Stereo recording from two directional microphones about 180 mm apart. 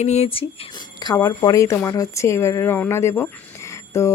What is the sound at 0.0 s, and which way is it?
Speech, 35° left (ahead or behind).